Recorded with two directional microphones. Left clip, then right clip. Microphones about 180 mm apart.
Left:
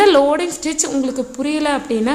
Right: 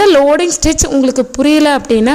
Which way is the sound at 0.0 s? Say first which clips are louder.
Right 4 dB; 35° right (ahead or behind).